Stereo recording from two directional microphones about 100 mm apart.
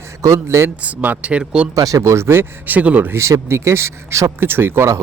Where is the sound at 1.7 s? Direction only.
35° right (ahead or behind).